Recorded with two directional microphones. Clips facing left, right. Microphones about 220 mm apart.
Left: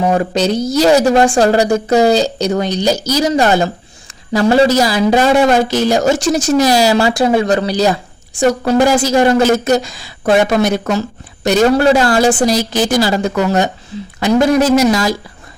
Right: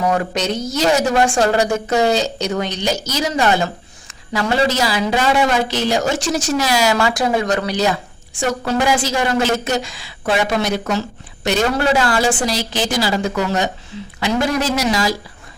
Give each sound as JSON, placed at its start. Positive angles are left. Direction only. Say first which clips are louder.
{"t": 0.0, "sound": "a woman's voice", "louder": "left 5 dB", "side_deg": 30}